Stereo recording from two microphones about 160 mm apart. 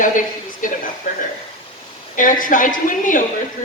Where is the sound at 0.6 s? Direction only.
55° left (ahead or behind).